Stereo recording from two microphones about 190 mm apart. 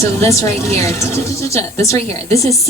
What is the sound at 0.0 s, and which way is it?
Speech, 15° left (ahead or behind).